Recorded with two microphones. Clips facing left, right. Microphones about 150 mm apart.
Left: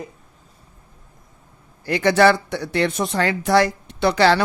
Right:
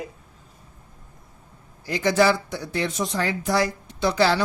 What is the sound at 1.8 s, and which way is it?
Speech, 65° left (ahead or behind).